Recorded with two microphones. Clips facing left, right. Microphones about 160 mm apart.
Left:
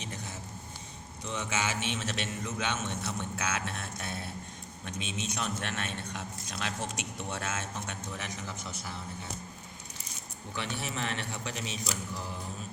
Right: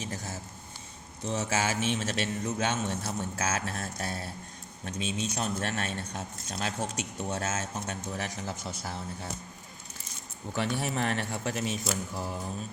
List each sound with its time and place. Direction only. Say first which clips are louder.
0.0 s a sound: right 4 dB; 40° right (ahead or behind)
1.3 s a man's voice: right 4 dB; 40° right (ahead or behind)
10.5 s speech: right 6 dB; 45° right (ahead or behind)